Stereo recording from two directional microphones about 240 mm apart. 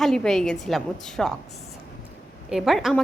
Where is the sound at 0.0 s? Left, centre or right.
Centre.